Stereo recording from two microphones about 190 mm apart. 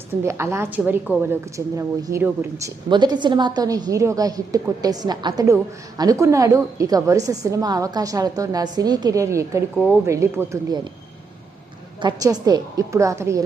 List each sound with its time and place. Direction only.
0.2 s a woman's voice: 15° right (ahead or behind)
12.0 s a woman's voice: 20° right (ahead or behind)